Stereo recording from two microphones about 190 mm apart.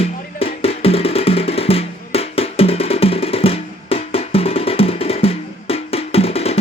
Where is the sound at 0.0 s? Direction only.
30° left (ahead or behind).